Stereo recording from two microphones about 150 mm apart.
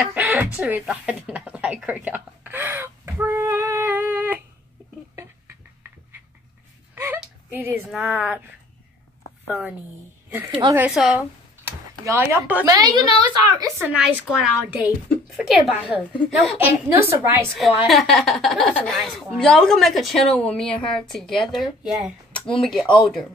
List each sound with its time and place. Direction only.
0.0 s chicken: 10° right (ahead or behind)
5.1 s a sound: 20° right (ahead or behind)
7.2 s a sound: 15° right (ahead or behind)
7.9 s a woman's voice: 10° right (ahead or behind)
9.5 s a woman's voice: 5° right (ahead or behind)
10.9 s speech: 5° right (ahead or behind)
11.9 s speech: 20° right (ahead or behind)
12.6 s a woman's voice: 25° right (ahead or behind)
13.8 s a woman's voice: 5° right (ahead or behind)
16.5 s a woman's voice: 15° right (ahead or behind)
17.8 s a woman's voice: centre (ahead or behind)
22.8 s speech: 35° left (ahead or behind)